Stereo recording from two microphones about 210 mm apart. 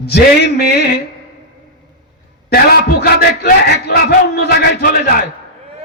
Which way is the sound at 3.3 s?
50° left (ahead or behind).